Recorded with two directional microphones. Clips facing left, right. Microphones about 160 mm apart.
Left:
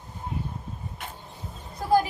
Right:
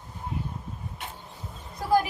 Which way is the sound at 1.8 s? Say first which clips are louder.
Left 1 dB; 30° left (ahead or behind).